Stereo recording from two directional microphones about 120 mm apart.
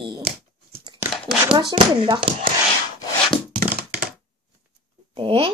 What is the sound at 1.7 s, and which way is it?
Speech, 40° right (ahead or behind).